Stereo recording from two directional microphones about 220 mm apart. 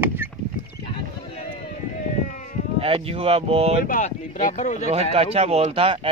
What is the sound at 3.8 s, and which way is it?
Speech, 35° left (ahead or behind).